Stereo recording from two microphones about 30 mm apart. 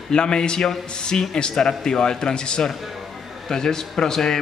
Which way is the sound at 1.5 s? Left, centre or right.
Centre.